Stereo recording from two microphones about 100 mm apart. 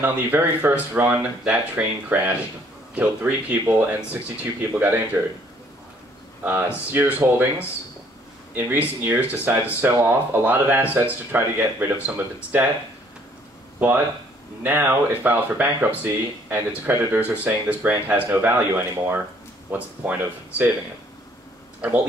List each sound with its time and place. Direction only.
0.0 s speech: 20° right (ahead or behind)
6.4 s speech: 20° right (ahead or behind)
8.5 s speech: 20° right (ahead or behind)
13.7 s speech: 20° right (ahead or behind)